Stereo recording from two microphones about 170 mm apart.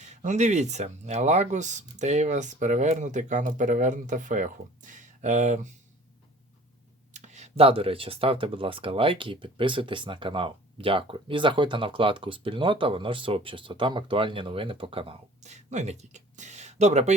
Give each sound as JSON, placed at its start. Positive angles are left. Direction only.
{"t": 0.0, "sound": "speech", "side_deg": -45}
{"t": 7.1, "sound": "speech", "side_deg": -45}